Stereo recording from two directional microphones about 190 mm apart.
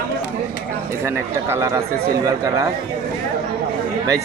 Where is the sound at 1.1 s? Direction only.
15° right (ahead or behind).